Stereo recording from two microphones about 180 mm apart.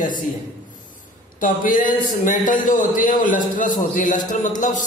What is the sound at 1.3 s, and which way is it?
A man's voice, 50° left (ahead or behind).